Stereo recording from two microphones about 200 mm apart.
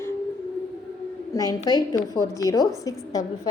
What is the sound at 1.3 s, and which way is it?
A woman's voice, 20° left (ahead or behind).